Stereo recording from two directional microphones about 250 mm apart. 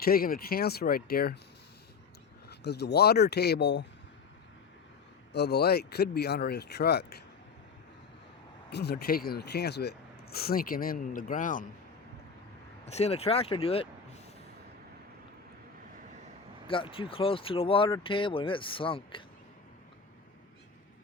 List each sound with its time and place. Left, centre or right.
0.0 s speech: left
2.5 s speech: left
5.3 s speech: left
8.7 s speech: left
12.8 s speech: left
16.6 s speech: left